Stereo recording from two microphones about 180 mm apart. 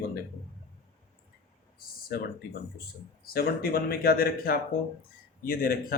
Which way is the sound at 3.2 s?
55° left (ahead or behind).